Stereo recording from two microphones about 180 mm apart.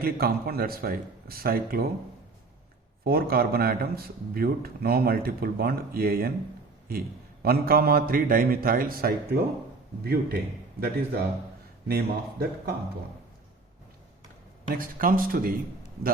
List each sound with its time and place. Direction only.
0.0 s speech: 55° right (ahead or behind)
3.0 s speech: 55° right (ahead or behind)
7.4 s speech: 55° right (ahead or behind)
14.8 s speech: 50° right (ahead or behind)